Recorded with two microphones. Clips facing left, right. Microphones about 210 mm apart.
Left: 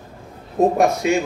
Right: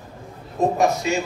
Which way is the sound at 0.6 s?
55° left (ahead or behind).